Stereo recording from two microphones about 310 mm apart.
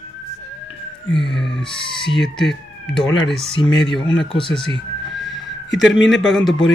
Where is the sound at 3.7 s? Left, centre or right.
Left.